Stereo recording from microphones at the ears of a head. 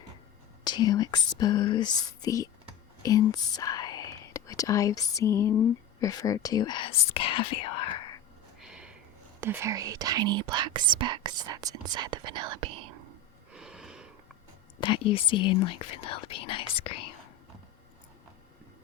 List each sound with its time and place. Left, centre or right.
0.6 s speech: left
9.4 s speech: right
14.8 s speech: left